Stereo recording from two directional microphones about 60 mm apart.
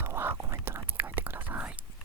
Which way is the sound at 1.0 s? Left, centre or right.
Right.